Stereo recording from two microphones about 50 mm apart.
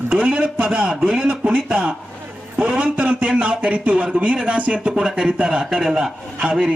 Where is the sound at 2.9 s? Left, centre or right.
Right.